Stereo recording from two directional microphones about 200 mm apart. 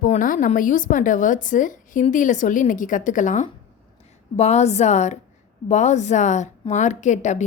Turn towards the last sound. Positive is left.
turn(degrees=35)  # may be behind; listen again after turning